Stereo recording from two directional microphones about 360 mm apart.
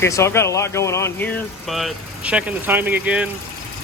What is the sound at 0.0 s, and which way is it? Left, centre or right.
Speech, centre.